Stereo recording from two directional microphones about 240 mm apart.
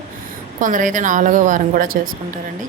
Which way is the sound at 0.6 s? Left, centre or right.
Right.